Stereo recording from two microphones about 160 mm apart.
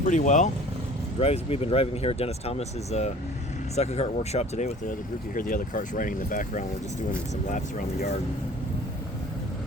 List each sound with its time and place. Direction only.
0.0 s speech: 50° left (ahead or behind)
1.2 s speech: 40° left (ahead or behind); by 8.1 s 55° left (ahead or behind)